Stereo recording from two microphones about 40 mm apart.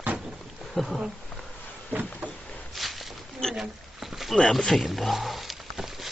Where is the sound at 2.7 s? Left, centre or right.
Centre.